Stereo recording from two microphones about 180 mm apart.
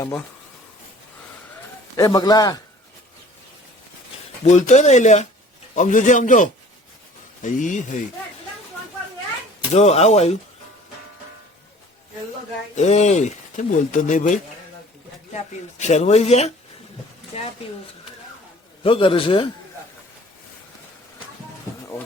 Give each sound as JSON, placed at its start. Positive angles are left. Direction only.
{"t": 2.0, "sound": "a man's voice", "side_deg": 20}
{"t": 4.4, "sound": "a man's voice", "side_deg": 40}
{"t": 9.7, "sound": "speech", "side_deg": 35}
{"t": 12.7, "sound": "speech", "side_deg": 40}
{"t": 15.8, "sound": "speech", "side_deg": 40}
{"t": 18.8, "sound": "a man's voice", "side_deg": 30}